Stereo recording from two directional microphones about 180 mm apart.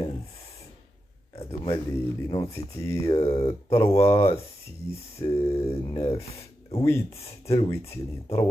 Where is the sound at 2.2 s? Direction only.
30° left (ahead or behind).